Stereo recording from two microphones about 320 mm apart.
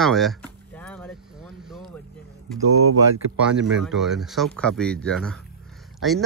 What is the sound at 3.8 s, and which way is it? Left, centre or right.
A man's voice, centre.